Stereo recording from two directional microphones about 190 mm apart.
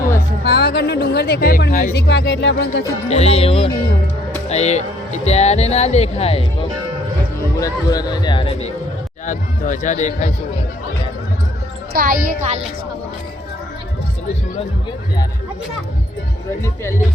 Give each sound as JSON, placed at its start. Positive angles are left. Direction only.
{"t": 0.4, "sound": "speech", "side_deg": 60}
{"t": 3.1, "sound": "speech", "side_deg": 35}
{"t": 7.6, "sound": "a man's voice", "side_deg": 20}
{"t": 9.2, "sound": "speech", "side_deg": 40}
{"t": 11.9, "sound": "speech", "side_deg": -45}